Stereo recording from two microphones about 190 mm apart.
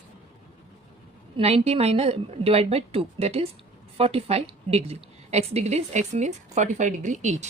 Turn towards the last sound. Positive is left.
turn(degrees=-40)  # may be behind; listen again after turning